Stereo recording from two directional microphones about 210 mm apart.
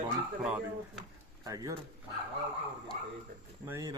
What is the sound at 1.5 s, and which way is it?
Speech, 15° right (ahead or behind).